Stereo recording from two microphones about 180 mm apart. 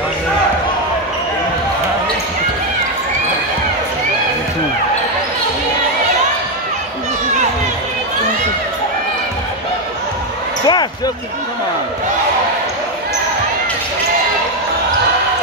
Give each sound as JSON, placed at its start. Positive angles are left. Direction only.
{"t": 10.6, "sound": "basketball bounce", "side_deg": 25}